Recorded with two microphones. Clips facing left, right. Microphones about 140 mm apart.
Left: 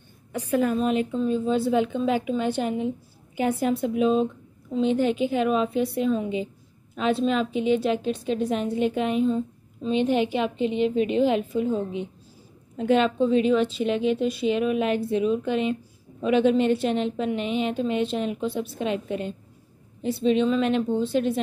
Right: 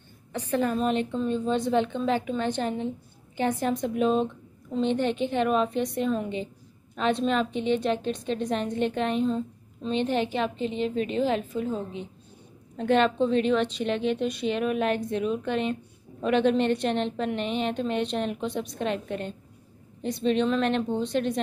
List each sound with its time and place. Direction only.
0.3 s a woman's voice: 10° left (ahead or behind)
10.8 s a woman's voice: 40° right (ahead or behind)
11.4 s a woman's voice: 10° left (ahead or behind)